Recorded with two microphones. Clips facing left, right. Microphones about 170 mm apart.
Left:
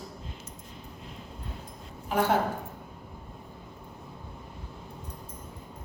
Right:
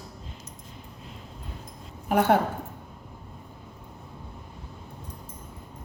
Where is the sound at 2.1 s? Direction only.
55° right (ahead or behind).